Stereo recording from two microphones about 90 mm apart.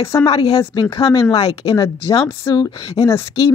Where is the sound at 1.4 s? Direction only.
90° left.